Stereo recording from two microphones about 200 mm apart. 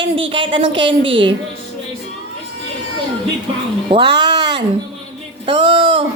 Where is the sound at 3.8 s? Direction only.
25° right (ahead or behind).